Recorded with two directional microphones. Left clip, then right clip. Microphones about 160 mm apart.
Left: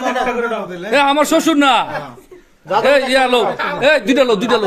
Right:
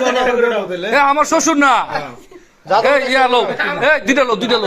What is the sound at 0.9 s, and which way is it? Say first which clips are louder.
Speech: even; 25° left (ahead or behind).